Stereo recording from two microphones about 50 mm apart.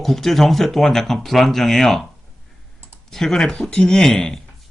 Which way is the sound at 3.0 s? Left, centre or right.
Centre.